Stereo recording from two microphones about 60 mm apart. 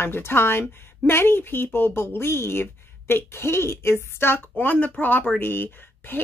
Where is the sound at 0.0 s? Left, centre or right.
Left.